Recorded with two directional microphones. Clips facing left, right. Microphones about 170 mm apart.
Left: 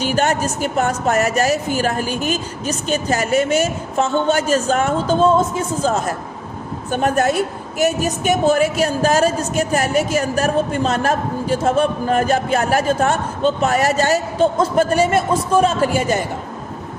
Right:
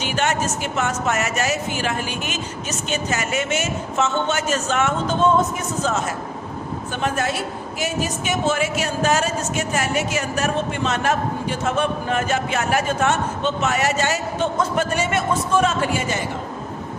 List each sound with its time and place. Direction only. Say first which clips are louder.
0.1 s a woman's voice: left 1 dB; 40° left (ahead or behind)
6.9 s a woman's voice: left 7 dB; 45° left (ahead or behind)